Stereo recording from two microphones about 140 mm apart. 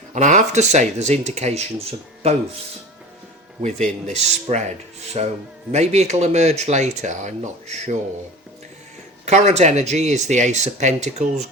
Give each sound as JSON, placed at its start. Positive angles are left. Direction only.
{"t": 0.1, "sound": "speech", "side_deg": -60}
{"t": 4.0, "sound": "speech", "side_deg": -55}
{"t": 9.2, "sound": "speech", "side_deg": -55}